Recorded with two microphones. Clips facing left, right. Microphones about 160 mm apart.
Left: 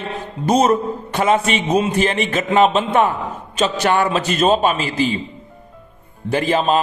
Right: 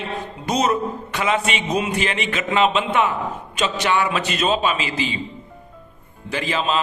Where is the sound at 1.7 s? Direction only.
30° left (ahead or behind).